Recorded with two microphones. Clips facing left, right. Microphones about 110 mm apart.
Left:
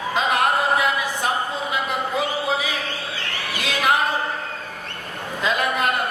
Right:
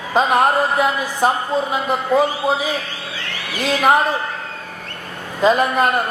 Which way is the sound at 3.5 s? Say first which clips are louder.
Right 6 dB; 40° right (ahead or behind).